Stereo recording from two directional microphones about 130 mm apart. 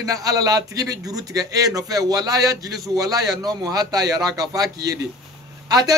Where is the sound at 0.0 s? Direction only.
25° right (ahead or behind).